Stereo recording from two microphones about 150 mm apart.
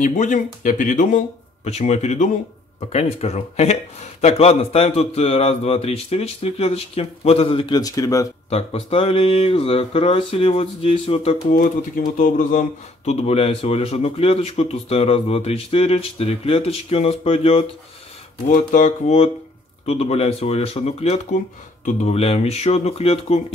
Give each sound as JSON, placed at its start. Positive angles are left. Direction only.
{"t": 0.0, "sound": "a man's voice", "side_deg": 55}
{"t": 8.5, "sound": "speech", "side_deg": 40}
{"t": 11.5, "sound": "speech", "side_deg": 65}
{"t": 18.5, "sound": "a man's voice", "side_deg": 60}